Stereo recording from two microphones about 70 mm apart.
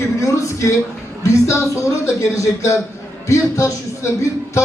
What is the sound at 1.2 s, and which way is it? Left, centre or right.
A man's voice, left.